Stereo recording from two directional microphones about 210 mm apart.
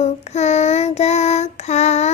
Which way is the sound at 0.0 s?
30° left (ahead or behind).